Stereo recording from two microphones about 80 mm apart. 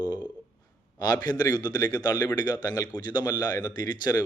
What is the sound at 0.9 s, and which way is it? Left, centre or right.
Speech, left.